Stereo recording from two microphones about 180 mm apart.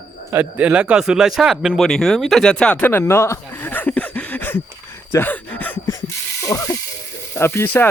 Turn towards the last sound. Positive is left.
turn(degrees=10)  # may be behind; listen again after turning